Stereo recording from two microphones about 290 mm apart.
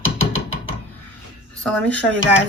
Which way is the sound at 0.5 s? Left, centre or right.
Centre.